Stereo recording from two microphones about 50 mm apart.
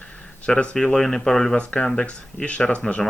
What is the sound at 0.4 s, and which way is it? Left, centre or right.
Speech, left.